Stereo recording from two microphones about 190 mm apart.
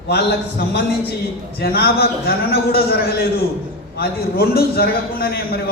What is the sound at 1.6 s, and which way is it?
Speech, 55° left (ahead or behind).